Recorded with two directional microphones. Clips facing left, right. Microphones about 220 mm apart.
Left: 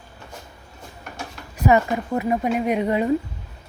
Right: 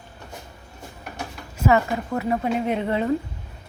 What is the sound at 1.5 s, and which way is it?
A woman's voice, 20° left (ahead or behind).